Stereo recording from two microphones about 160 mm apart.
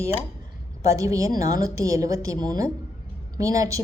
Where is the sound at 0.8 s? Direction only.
20° right (ahead or behind).